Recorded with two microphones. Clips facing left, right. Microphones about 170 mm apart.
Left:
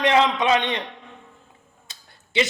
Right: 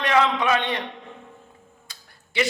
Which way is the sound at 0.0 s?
20° left (ahead or behind).